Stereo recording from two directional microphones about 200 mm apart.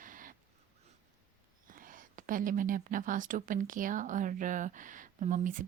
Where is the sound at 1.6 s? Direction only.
45° right (ahead or behind).